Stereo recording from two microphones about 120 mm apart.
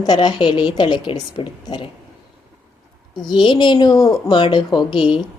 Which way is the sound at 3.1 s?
40° left (ahead or behind).